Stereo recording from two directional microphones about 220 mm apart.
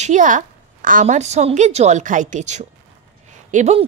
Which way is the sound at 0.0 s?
35° right (ahead or behind).